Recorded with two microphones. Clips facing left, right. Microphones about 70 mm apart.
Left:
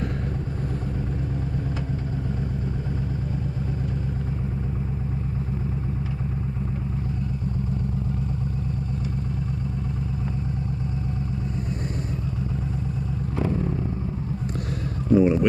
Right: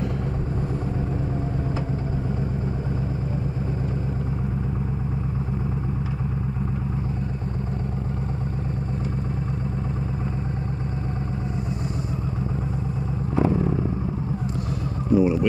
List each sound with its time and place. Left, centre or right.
13.4 s vehicle: right
15.0 s vehicle: centre